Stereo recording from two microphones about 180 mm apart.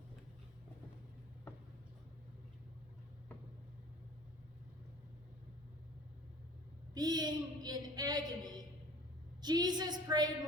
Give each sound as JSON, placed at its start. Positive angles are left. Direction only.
{"t": 6.9, "sound": "a woman's voice", "side_deg": -20}